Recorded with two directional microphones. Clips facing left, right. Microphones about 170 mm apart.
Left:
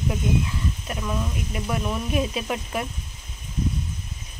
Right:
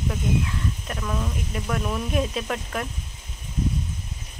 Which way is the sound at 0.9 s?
10° left (ahead or behind).